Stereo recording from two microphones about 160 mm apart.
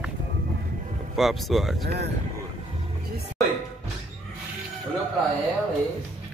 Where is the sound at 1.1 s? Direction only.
Centre (ahead or behind).